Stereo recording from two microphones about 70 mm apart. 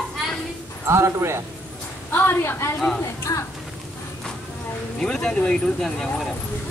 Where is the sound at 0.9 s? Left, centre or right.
Right.